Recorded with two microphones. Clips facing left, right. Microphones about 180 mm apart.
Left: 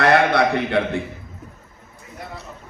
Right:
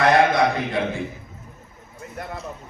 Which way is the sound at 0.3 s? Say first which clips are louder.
Left 2 dB; 65° left (ahead or behind).